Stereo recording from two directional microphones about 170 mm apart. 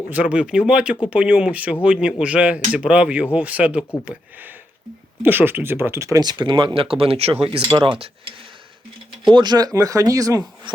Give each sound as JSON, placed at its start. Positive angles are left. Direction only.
{"t": 0.1, "sound": "speech", "side_deg": -10}
{"t": 7.7, "sound": "speech", "side_deg": -15}
{"t": 9.3, "sound": "speech", "side_deg": -25}